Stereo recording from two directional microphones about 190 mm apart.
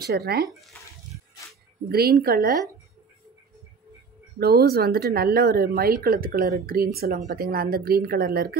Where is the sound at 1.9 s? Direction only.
55° right (ahead or behind).